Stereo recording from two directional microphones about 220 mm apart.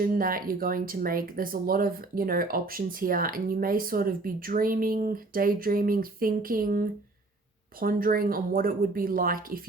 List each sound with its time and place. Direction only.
0.0 s speech: 40° right (ahead or behind)